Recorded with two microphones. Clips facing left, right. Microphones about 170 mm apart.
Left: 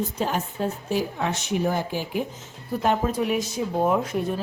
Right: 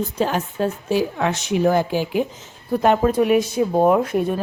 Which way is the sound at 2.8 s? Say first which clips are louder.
Right 6 dB; 65° right (ahead or behind).